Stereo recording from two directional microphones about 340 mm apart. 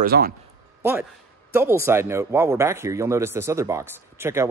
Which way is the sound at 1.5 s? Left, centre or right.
Centre.